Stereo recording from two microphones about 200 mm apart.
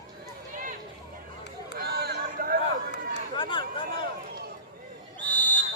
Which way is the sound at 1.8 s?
55° right (ahead or behind).